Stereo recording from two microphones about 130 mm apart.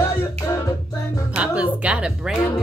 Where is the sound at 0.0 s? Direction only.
20° left (ahead or behind).